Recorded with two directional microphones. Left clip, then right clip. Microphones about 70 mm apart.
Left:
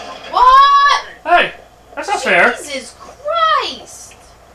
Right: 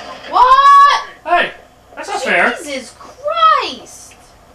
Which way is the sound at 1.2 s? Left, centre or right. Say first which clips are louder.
Left 3 dB; left.